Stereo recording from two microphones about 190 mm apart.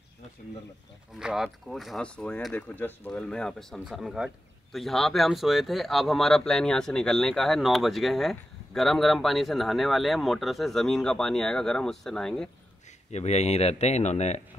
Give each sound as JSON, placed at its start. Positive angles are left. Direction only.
{"t": 1.1, "sound": "speech", "side_deg": 0}
{"t": 13.1, "sound": "speech", "side_deg": 35}